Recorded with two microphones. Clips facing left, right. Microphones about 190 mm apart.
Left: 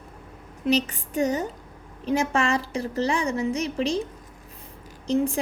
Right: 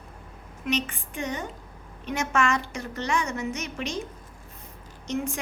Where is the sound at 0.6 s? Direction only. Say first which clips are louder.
Left 6 dB; 35° left (ahead or behind).